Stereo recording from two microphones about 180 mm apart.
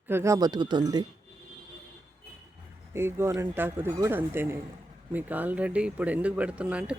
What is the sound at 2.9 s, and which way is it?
Speech, 15° right (ahead or behind).